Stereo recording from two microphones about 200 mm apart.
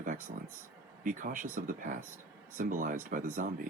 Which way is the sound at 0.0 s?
40° right (ahead or behind).